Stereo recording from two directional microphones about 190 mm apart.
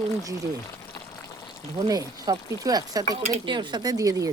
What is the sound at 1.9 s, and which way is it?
Speech, 20° right (ahead or behind).